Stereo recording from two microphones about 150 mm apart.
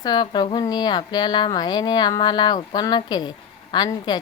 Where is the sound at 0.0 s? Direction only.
30° left (ahead or behind).